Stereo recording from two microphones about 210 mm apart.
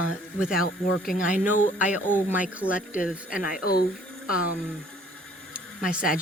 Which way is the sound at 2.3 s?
5° right (ahead or behind).